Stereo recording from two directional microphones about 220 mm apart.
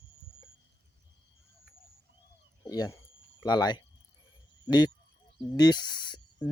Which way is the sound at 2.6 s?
15° left (ahead or behind).